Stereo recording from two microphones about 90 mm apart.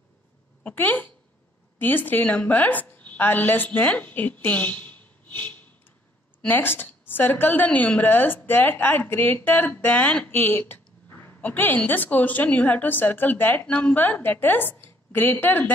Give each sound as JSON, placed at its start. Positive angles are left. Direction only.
{"t": 0.7, "sound": "a woman's voice", "side_deg": 20}